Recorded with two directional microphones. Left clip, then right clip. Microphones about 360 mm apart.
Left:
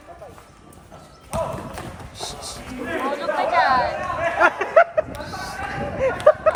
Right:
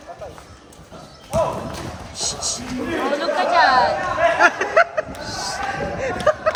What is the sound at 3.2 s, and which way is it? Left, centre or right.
Speech, centre.